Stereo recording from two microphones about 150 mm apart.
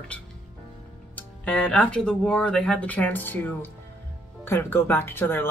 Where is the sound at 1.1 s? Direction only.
10° left (ahead or behind).